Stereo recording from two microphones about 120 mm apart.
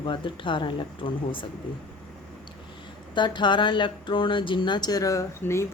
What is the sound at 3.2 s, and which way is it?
Speech, 40° left (ahead or behind).